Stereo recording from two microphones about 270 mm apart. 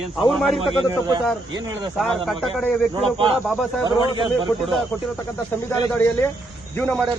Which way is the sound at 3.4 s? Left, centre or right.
Centre.